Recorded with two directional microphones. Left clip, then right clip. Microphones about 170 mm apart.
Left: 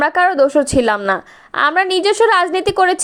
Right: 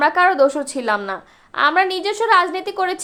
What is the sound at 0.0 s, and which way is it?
A woman's voice, 35° left (ahead or behind).